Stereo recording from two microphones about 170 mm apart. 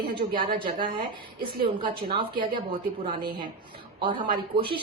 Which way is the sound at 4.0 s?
30° right (ahead or behind).